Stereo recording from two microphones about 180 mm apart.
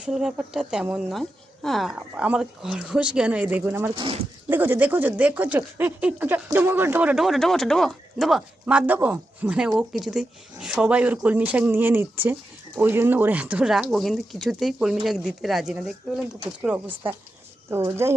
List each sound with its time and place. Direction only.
0.0 s a woman's voice: 5° right (ahead or behind)
3.9 s speech: 30° right (ahead or behind)
4.4 s a woman's voice: 10° right (ahead or behind)